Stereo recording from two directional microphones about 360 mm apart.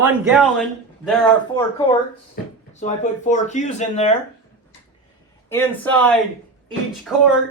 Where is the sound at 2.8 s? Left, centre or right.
Centre.